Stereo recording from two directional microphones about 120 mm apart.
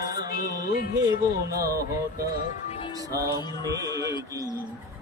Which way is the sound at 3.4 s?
30° left (ahead or behind).